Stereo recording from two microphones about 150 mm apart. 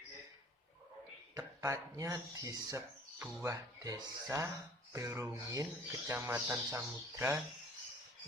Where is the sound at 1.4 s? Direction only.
20° right (ahead or behind).